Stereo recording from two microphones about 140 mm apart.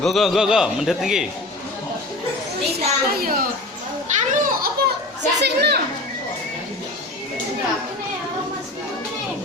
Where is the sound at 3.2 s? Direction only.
90° right.